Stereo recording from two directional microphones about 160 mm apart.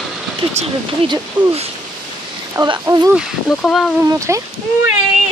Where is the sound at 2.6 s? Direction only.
20° right (ahead or behind).